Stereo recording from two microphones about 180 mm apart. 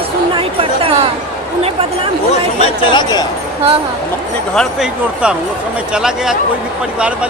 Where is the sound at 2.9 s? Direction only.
25° left (ahead or behind).